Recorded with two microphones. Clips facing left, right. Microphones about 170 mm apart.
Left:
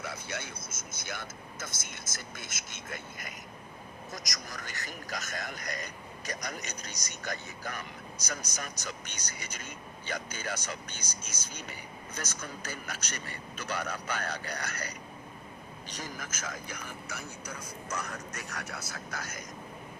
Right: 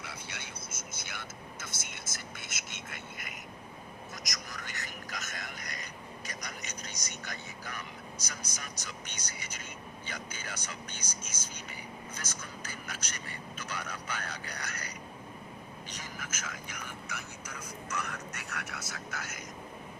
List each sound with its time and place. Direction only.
0.0 s speech: 45° left (ahead or behind)
10.9 s speech: 50° right (ahead or behind)
12.4 s speech: 40° left (ahead or behind)